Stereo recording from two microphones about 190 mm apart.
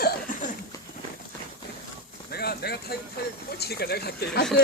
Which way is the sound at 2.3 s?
55° left (ahead or behind).